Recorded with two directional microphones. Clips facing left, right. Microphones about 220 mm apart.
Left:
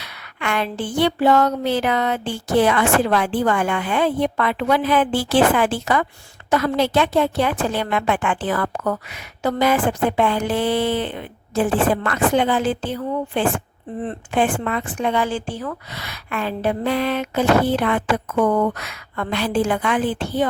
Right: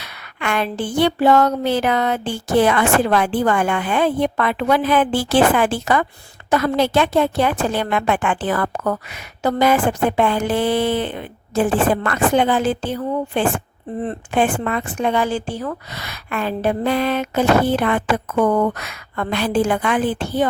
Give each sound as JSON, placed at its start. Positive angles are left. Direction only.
{"t": 0.0, "sound": "a woman's voice", "side_deg": -50}